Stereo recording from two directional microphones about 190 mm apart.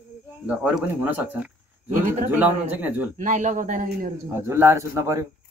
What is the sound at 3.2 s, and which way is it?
Speech, 40° right (ahead or behind).